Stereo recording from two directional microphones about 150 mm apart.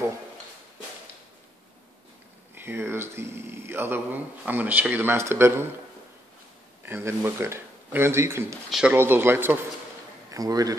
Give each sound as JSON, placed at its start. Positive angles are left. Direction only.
{"t": 2.5, "sound": "speech", "side_deg": -15}
{"t": 6.9, "sound": "speech", "side_deg": -15}
{"t": 8.6, "sound": "speech", "side_deg": 0}
{"t": 8.9, "sound": "a man's voice", "side_deg": -15}